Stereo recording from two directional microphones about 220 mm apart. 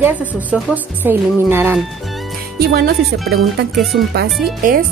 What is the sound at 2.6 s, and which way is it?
Speech, 45° right (ahead or behind).